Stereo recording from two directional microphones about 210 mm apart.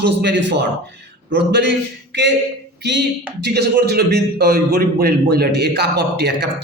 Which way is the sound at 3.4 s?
50° right (ahead or behind).